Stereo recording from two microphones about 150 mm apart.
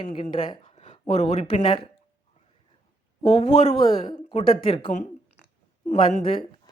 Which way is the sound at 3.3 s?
45° left (ahead or behind).